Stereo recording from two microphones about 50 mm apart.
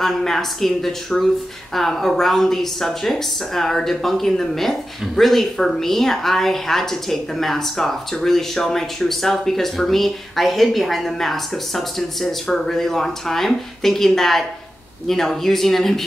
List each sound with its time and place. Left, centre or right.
0.0 s speech: centre